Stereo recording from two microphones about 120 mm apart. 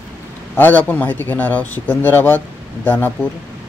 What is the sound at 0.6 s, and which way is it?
A man's voice, 15° left (ahead or behind).